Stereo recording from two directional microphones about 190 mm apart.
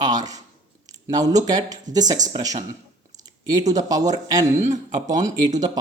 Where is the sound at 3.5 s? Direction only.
20° right (ahead or behind).